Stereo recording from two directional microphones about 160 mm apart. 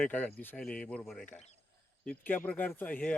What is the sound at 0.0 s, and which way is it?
A man's voice, 10° left (ahead or behind).